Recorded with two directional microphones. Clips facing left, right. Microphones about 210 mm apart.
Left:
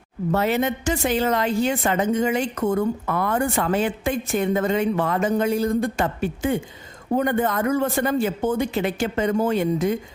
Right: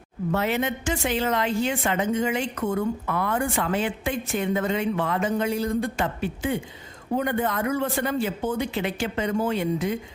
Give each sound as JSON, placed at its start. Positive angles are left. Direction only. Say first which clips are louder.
{"t": 0.3, "sound": "a woman's voice", "louder": "left 4 dB", "side_deg": 40}